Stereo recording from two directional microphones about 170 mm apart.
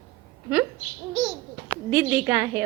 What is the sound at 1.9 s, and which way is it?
Speech, 10° right (ahead or behind).